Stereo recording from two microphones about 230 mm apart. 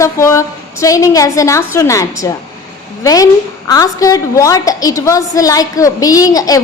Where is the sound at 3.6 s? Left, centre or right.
Centre.